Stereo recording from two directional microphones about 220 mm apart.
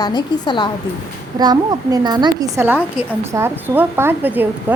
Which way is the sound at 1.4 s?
20° right (ahead or behind).